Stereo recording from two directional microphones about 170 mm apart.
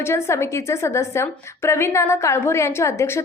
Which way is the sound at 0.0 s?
15° left (ahead or behind).